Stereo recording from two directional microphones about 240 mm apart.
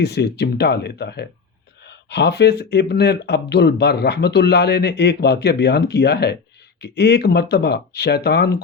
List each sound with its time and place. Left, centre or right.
0.0 s speech: left